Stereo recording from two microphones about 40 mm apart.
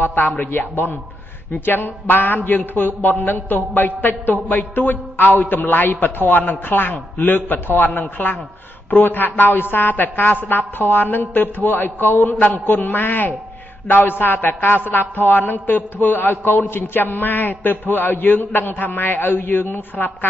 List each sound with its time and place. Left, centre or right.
0.0 s a man's voice: left